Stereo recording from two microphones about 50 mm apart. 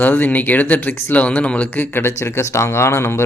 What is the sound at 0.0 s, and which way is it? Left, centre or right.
Speech, left.